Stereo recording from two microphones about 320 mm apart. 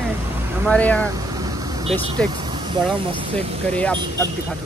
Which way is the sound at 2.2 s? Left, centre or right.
Centre.